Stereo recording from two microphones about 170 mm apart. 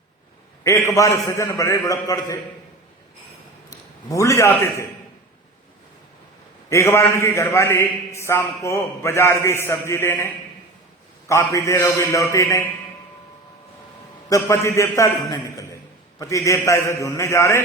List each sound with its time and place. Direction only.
0.6 s a man's voice: 15° left (ahead or behind)
3.7 s a man's voice: 20° left (ahead or behind)
6.7 s a man's voice: 15° left (ahead or behind)
14.3 s a man's voice: 15° left (ahead or behind)